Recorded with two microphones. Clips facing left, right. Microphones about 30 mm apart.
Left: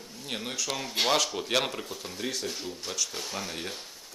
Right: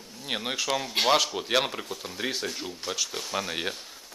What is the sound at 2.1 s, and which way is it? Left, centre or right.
Speech, right.